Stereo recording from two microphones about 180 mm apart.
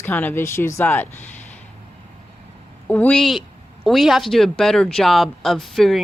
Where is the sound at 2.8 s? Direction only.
10° left (ahead or behind).